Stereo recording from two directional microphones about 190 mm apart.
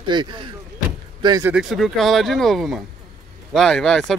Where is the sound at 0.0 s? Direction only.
25° right (ahead or behind).